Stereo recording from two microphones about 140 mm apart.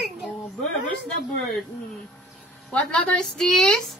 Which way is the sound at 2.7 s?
5° left (ahead or behind).